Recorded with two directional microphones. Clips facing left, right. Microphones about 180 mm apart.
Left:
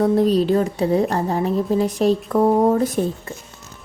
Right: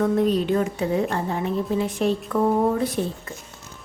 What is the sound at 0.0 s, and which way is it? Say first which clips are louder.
A woman's voice: left 4 dB; 35° left (ahead or behind).